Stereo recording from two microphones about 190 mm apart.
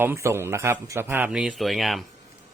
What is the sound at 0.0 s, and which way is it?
Speech, 15° right (ahead or behind).